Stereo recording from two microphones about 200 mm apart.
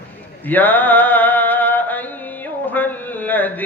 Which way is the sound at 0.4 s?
10° left (ahead or behind).